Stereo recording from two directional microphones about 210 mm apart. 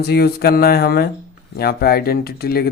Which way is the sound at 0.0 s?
50° left (ahead or behind).